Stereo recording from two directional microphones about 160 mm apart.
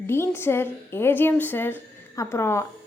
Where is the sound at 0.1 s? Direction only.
15° left (ahead or behind).